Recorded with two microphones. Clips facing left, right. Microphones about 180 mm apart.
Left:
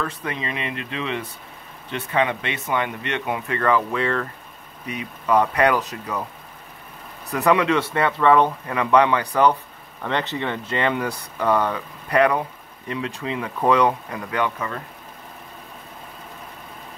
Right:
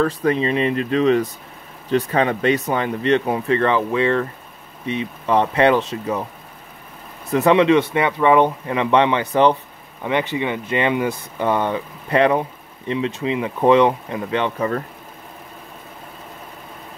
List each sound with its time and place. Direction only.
0.0 s speech: 35° right (ahead or behind)
7.3 s speech: 25° right (ahead or behind)